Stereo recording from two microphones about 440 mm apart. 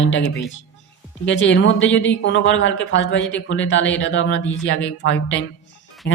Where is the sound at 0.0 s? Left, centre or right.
Left.